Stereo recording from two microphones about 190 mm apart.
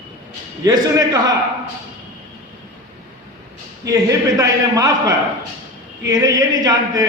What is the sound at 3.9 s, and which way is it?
A man's voice, 20° right (ahead or behind).